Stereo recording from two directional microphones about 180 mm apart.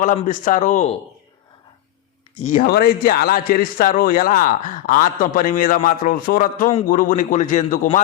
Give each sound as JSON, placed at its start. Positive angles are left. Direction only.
{"t": 0.0, "sound": "a man's voice", "side_deg": 45}
{"t": 2.4, "sound": "a man's voice", "side_deg": 45}
{"t": 2.6, "sound": "a man's voice", "side_deg": 55}